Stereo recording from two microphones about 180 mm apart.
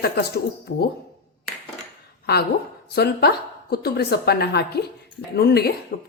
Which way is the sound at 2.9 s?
65° left (ahead or behind).